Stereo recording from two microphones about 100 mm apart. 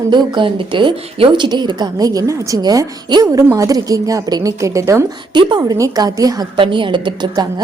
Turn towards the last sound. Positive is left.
turn(degrees=-50)  # may be behind; listen again after turning